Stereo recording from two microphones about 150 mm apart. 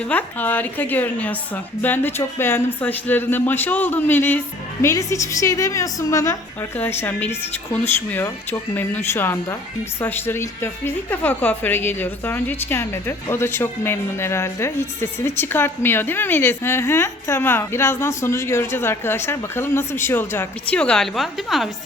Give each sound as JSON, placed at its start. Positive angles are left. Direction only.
{"t": 0.0, "sound": "a woman's voice", "side_deg": 10}